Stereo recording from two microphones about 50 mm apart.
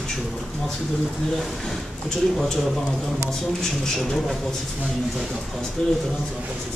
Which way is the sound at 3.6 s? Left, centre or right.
Centre.